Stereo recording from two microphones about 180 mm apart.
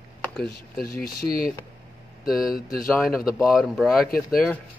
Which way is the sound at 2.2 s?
5° right (ahead or behind).